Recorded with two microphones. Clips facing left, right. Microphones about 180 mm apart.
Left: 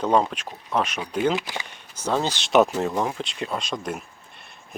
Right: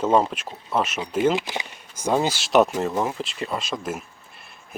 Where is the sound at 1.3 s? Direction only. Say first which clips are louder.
Right 2 dB; 20° right (ahead or behind).